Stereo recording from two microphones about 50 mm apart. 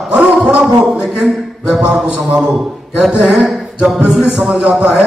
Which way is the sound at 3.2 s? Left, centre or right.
Centre.